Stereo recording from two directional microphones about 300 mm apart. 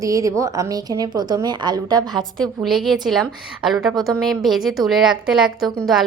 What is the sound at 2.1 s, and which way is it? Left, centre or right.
A woman's voice, centre.